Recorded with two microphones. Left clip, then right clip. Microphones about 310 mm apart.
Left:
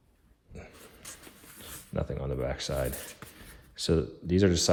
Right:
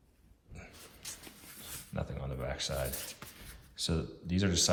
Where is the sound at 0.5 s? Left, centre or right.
Left.